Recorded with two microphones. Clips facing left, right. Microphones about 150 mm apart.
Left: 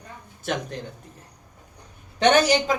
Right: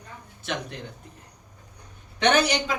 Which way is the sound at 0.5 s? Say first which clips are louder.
Left 4 dB; 45° left (ahead or behind).